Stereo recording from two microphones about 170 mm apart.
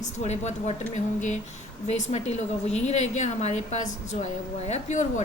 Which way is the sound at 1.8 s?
40° left (ahead or behind).